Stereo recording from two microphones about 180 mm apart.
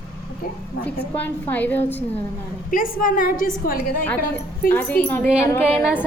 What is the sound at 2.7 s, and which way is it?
A woman's voice, 50° left (ahead or behind).